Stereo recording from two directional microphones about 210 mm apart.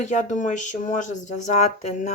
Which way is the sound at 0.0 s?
35° left (ahead or behind).